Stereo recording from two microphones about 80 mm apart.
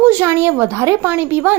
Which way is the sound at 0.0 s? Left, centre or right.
Right.